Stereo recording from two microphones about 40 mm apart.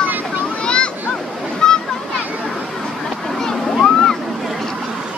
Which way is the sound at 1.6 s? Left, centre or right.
Centre.